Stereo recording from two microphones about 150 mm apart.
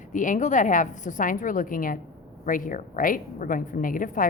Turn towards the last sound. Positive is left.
turn(degrees=65)  # may be behind; listen again after turning